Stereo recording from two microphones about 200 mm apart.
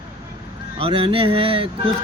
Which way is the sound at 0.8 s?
25° right (ahead or behind).